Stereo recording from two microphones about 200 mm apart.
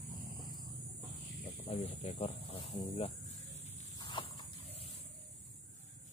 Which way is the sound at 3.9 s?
25° left (ahead or behind).